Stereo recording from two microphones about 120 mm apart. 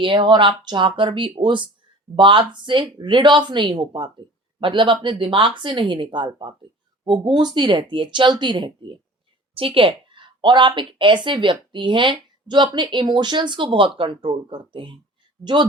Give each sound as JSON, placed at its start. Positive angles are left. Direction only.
{"t": 0.0, "sound": "a woman's voice", "side_deg": -45}